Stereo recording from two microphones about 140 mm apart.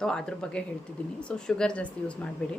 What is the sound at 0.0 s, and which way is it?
A woman's voice, 5° left (ahead or behind).